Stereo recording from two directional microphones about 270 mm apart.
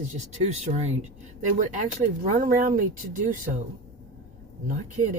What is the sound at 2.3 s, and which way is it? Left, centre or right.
Speech, right.